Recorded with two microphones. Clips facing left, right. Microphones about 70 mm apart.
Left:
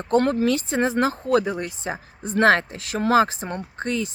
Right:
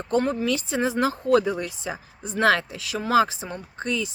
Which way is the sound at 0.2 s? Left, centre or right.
Left.